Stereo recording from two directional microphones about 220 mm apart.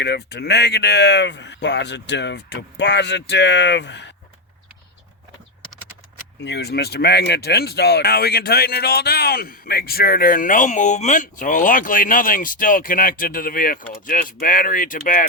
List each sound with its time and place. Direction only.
0.0 s speech: 50° left (ahead or behind)
6.4 s speech: 50° left (ahead or behind)